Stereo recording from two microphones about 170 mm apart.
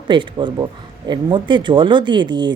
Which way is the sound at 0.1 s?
30° right (ahead or behind).